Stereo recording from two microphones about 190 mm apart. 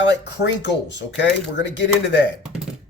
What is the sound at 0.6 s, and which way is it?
Speech, 65° left (ahead or behind).